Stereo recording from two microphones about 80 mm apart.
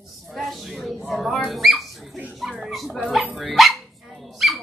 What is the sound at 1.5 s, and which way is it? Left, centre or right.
Dog, centre.